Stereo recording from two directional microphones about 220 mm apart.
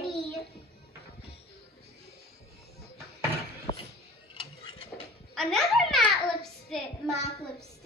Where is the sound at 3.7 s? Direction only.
25° left (ahead or behind).